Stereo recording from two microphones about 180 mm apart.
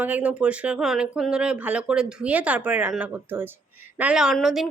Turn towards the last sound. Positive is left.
turn(degrees=0)  # may be behind; listen again after turning